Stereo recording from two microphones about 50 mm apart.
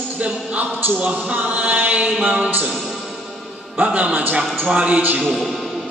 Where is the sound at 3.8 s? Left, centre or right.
Right.